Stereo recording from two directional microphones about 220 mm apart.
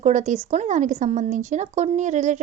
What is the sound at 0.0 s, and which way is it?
A woman's voice, 35° right (ahead or behind).